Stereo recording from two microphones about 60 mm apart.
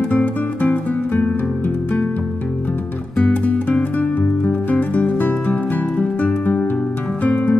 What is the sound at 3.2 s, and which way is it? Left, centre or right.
Music, left.